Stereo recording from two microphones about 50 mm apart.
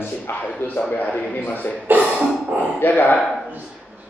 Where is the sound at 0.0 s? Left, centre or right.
Left.